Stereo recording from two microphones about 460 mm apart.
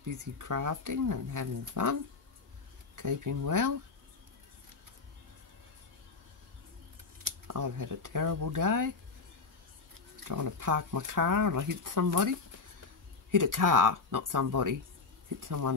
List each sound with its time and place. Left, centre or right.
0.0 s speech: right
3.0 s speech: right
7.2 s speech: right
10.2 s speech: right